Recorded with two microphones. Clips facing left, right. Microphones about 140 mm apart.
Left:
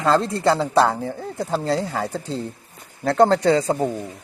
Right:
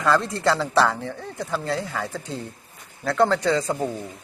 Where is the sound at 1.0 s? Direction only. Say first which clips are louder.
Left 4 dB; 35° left (ahead or behind).